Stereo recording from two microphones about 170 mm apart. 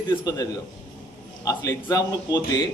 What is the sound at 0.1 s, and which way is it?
Speech, 25° left (ahead or behind).